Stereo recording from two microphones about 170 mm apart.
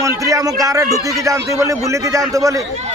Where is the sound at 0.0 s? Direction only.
20° right (ahead or behind).